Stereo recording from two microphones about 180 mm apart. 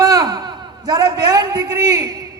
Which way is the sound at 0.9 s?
20° right (ahead or behind).